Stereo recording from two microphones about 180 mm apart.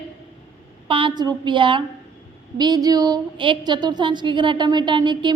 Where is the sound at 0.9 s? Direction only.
30° right (ahead or behind).